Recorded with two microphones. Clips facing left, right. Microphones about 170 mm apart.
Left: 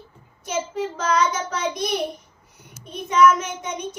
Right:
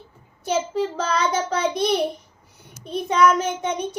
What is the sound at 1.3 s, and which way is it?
A child's voice, 30° right (ahead or behind).